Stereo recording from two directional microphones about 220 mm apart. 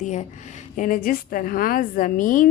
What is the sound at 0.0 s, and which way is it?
A woman's voice, 35° left (ahead or behind).